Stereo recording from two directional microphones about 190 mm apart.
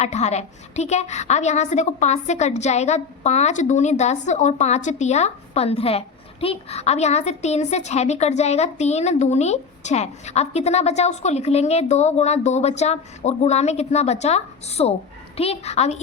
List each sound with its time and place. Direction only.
0.0 s a woman's voice: 35° left (ahead or behind)